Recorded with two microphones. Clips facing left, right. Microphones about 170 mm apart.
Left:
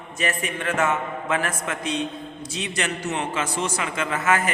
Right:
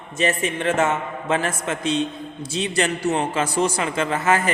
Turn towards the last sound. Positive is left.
turn(degrees=-30)  # may be behind; listen again after turning